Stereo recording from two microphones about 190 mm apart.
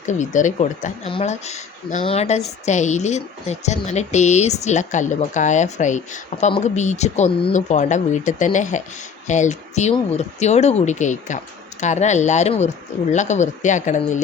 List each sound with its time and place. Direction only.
0.0 s speech: 40° left (ahead or behind)